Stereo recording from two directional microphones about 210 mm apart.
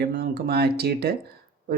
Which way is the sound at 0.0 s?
50° right (ahead or behind).